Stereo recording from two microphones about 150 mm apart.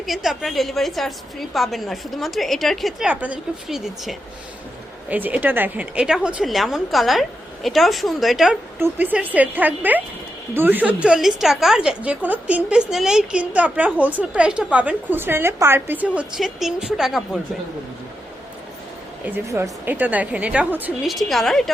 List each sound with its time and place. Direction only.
0.0 s a woman's voice: centre (ahead or behind)
8.8 s a woman's voice: 10° right (ahead or behind)
19.5 s a woman's voice: 20° right (ahead or behind)
21.0 s a woman's voice: centre (ahead or behind)